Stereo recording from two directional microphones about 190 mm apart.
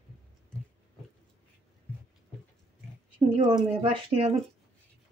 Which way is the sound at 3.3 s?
25° right (ahead or behind).